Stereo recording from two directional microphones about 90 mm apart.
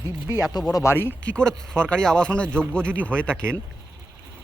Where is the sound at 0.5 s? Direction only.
45° left (ahead or behind).